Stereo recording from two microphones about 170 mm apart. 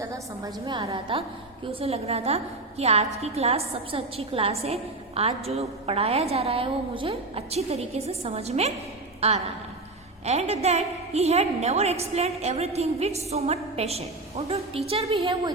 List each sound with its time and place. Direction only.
0.0 s a woman's voice: 20° right (ahead or behind)